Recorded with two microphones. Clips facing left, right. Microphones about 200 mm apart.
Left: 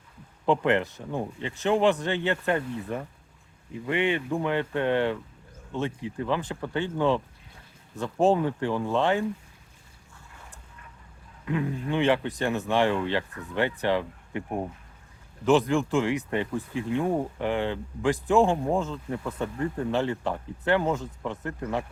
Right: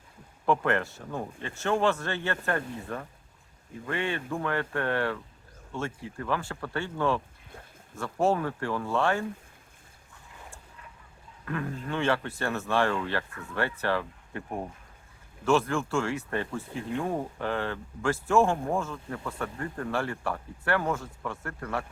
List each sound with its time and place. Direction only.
0.4 s speech: 20° left (ahead or behind)
11.4 s speech: 15° left (ahead or behind)